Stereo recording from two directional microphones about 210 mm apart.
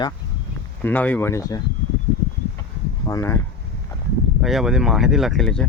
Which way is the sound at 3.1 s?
15° left (ahead or behind).